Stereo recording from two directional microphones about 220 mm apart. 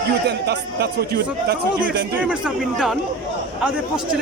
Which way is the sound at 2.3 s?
5° right (ahead or behind).